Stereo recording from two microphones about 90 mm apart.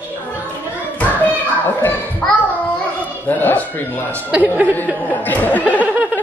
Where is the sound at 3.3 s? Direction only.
20° left (ahead or behind).